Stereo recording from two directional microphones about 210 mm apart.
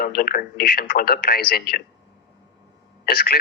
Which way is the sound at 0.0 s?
45° left (ahead or behind).